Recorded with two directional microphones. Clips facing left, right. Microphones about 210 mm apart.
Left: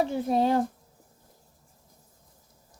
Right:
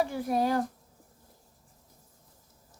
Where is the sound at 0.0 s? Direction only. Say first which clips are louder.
Left 3 dB; 25° left (ahead or behind).